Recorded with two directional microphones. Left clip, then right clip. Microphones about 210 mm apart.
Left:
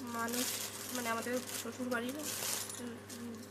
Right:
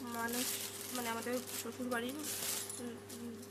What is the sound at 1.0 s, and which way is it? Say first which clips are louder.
Speech: left 3 dB; 10° right (ahead or behind).